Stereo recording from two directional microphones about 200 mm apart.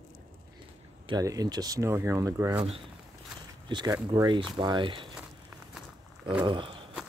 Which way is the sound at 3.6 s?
20° right (ahead or behind).